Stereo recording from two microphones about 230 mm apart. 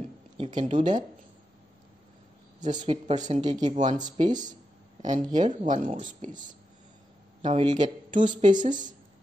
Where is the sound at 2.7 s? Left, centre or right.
Right.